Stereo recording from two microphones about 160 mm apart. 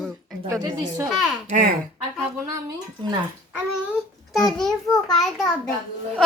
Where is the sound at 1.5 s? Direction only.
60° right (ahead or behind).